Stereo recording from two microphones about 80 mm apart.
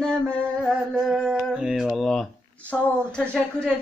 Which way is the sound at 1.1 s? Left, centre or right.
Centre.